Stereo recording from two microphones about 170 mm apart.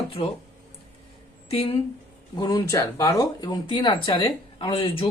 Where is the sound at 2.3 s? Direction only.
25° left (ahead or behind).